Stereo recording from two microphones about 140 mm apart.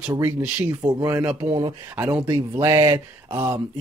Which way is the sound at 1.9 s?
15° right (ahead or behind).